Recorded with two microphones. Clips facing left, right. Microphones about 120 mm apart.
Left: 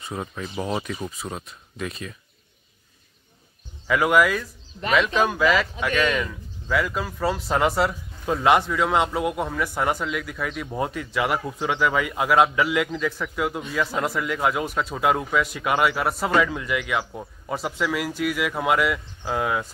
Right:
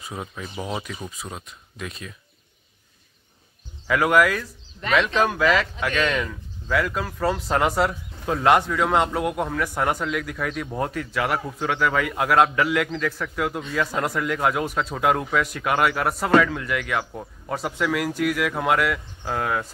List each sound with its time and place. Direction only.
0.0 s speech: centre (ahead or behind)
3.8 s a man's voice: 5° left (ahead or behind)